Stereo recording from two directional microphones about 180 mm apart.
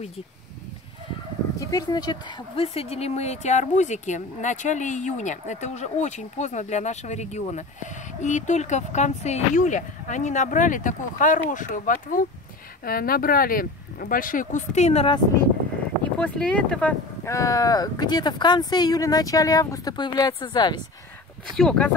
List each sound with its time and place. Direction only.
1.6 s speech: 20° left (ahead or behind); by 15.1 s 35° left (ahead or behind)
16.0 s speech: 5° left (ahead or behind); by 20.8 s 25° left (ahead or behind)
21.5 s speech: 5° left (ahead or behind)